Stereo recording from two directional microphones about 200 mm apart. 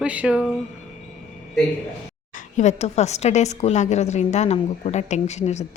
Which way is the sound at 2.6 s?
35° left (ahead or behind).